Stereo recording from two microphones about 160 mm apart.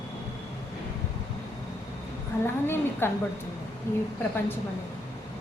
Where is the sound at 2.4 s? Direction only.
15° left (ahead or behind).